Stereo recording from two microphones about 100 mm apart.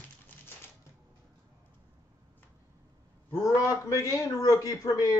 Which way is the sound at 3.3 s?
30° left (ahead or behind).